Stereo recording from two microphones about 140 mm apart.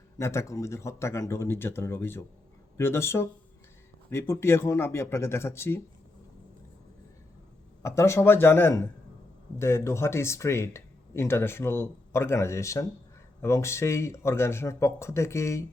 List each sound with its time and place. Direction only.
0.2 s speech: 20° left (ahead or behind)
7.8 s speech: 20° left (ahead or behind)